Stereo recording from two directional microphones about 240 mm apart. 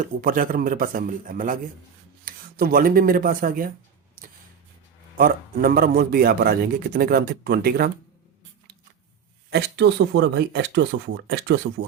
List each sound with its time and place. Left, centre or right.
0.2 s a man's voice: right
4.2 s a sound: right
5.1 s a man's voice: right
9.5 s speech: right